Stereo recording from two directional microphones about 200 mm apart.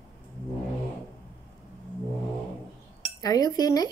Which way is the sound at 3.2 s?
20° left (ahead or behind).